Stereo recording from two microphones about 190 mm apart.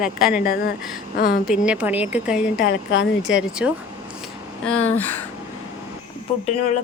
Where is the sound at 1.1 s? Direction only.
50° left (ahead or behind).